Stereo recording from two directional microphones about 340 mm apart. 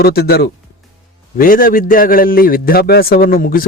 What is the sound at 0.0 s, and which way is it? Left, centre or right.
A man's voice, left.